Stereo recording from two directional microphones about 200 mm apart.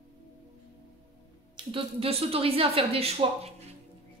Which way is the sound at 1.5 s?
30° right (ahead or behind).